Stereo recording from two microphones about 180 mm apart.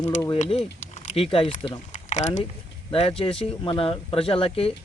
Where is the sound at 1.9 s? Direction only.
40° left (ahead or behind).